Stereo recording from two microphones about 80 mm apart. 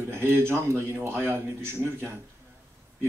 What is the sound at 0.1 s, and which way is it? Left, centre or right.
Speech, right.